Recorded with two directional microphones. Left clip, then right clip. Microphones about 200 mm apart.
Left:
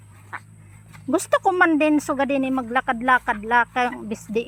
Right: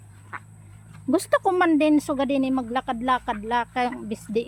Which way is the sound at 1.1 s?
15° right (ahead or behind).